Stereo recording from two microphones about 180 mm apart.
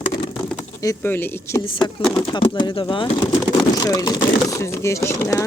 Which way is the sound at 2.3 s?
25° left (ahead or behind).